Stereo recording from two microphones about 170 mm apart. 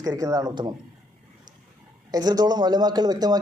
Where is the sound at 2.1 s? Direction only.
25° right (ahead or behind).